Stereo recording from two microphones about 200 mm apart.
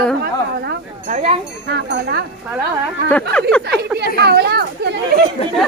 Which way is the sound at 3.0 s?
5° left (ahead or behind).